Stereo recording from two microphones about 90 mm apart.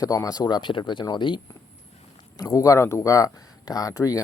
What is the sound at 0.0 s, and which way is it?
Speech, 40° left (ahead or behind).